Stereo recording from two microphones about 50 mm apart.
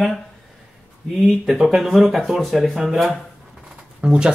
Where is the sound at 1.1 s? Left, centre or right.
Centre.